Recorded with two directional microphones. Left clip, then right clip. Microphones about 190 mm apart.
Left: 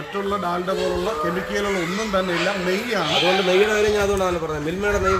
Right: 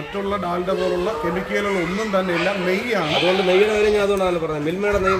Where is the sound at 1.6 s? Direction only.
15° right (ahead or behind).